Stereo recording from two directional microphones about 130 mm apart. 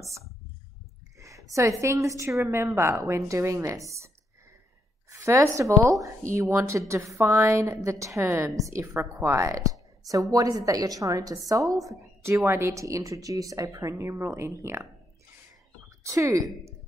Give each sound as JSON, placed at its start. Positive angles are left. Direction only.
{"t": 1.2, "sound": "a woman's voice", "side_deg": -25}
{"t": 5.1, "sound": "a woman's voice", "side_deg": -20}
{"t": 16.0, "sound": "a woman's voice", "side_deg": -25}